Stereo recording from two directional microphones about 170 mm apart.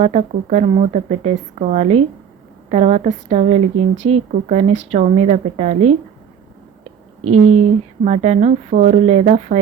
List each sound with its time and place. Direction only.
0.0 s a woman's voice: 40° right (ahead or behind)
7.3 s a woman's voice: 40° right (ahead or behind)